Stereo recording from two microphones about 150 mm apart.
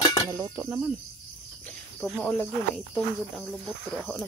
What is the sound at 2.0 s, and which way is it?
Speech, 10° left (ahead or behind).